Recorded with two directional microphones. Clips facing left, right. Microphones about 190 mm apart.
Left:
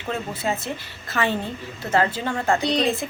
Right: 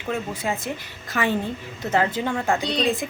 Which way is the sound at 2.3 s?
Centre (ahead or behind).